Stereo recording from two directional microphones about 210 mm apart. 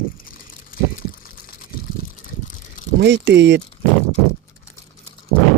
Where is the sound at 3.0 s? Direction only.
55° right (ahead or behind).